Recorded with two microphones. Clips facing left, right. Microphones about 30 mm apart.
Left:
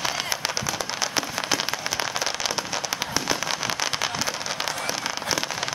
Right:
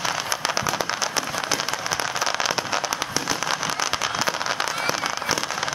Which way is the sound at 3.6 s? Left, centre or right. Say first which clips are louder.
Right 2 dB; centre.